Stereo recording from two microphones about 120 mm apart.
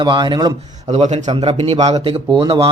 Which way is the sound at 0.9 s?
70° right (ahead or behind).